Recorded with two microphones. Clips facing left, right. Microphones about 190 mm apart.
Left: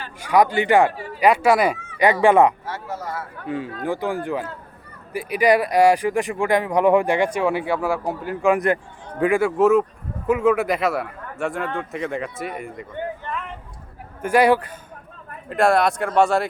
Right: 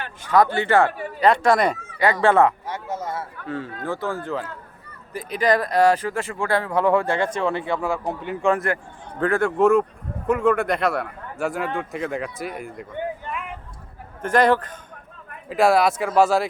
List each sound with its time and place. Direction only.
0.2 s speech: 15° left (ahead or behind)
2.6 s speech: 20° right (ahead or behind)
3.4 s speech: 15° left (ahead or behind)
8.5 s a man's voice: 20° left (ahead or behind); by 12.9 s centre (ahead or behind)
13.0 s a sound: 10° right (ahead or behind)
14.2 s speech: 10° left (ahead or behind)
15.4 s a man's voice: centre (ahead or behind)